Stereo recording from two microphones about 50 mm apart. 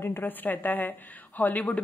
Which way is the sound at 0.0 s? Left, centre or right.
Left.